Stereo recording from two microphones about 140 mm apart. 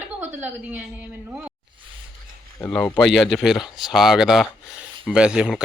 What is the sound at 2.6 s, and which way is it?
Speech, 5° left (ahead or behind).